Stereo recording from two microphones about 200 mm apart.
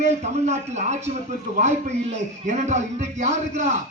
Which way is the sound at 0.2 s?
35° right (ahead or behind).